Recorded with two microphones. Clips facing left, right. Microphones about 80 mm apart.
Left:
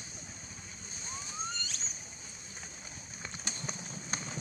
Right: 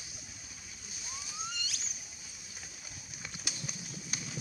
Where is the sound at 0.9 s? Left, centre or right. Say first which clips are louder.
Left 2 dB; left.